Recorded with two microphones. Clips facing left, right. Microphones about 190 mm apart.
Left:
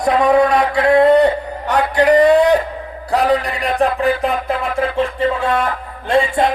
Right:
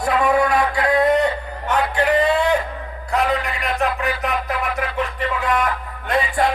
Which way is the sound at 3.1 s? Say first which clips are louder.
Left 5 dB; 35° left (ahead or behind).